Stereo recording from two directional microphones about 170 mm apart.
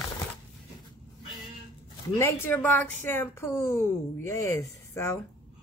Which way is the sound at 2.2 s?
10° left (ahead or behind).